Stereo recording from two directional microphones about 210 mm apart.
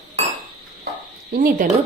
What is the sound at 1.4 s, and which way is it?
Speech, 40° right (ahead or behind).